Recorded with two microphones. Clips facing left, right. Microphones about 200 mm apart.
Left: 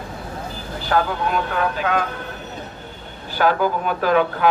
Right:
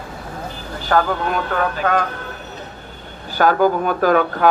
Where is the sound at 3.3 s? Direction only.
45° right (ahead or behind).